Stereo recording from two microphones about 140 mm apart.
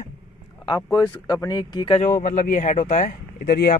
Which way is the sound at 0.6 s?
30° left (ahead or behind).